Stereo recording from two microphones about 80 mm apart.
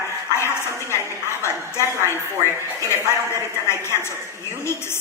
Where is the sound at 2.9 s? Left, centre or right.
Left.